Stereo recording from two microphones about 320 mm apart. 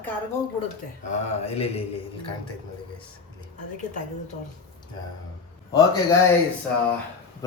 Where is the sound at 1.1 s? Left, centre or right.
Centre.